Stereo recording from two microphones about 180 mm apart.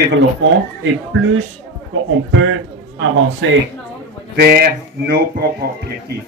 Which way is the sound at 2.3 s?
90° right.